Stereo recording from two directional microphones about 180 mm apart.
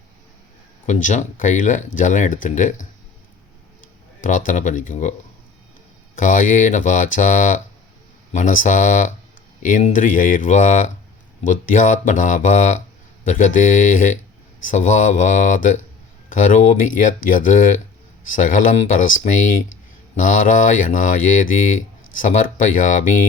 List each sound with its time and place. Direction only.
0.9 s speech: 45° left (ahead or behind)
4.2 s speech: 45° left (ahead or behind)
6.1 s speech: 45° left (ahead or behind)